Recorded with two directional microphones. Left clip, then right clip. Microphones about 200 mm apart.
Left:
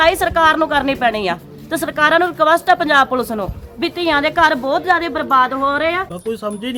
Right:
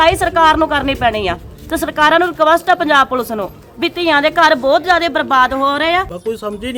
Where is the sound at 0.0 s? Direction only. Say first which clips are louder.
Right 2 dB; centre (ahead or behind); by 6.1 s 60° right (ahead or behind).